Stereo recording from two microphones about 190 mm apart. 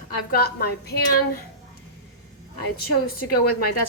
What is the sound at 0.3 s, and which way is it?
Speech, 55° left (ahead or behind).